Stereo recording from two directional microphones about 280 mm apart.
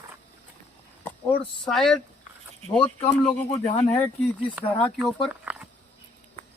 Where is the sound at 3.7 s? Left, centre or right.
Centre.